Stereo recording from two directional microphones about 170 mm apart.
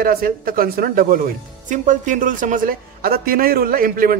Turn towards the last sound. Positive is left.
turn(degrees=-55)  # may be behind; listen again after turning